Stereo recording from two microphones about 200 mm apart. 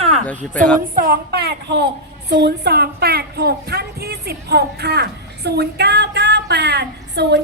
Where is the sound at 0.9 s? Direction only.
50° right (ahead or behind).